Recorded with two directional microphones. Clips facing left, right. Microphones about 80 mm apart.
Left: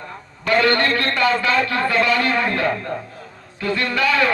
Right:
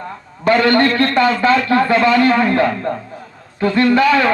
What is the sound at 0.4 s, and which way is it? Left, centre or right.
Speech, right.